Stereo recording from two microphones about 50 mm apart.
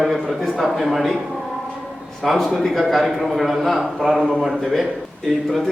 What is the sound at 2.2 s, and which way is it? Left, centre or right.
A man's voice, centre.